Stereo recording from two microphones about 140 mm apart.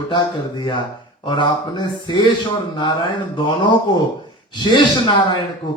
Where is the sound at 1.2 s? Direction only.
35° left (ahead or behind).